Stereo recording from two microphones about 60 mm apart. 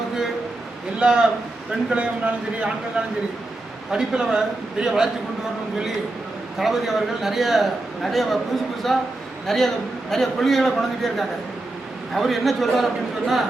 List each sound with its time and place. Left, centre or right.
0.9 s a man's voice: centre
3.9 s a man's voice: centre
6.6 s a man's voice: centre